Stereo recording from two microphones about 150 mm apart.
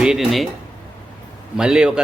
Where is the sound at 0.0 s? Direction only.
5° right (ahead or behind).